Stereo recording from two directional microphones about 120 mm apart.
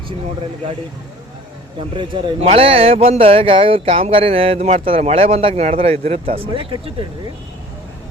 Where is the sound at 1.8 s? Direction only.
55° right (ahead or behind).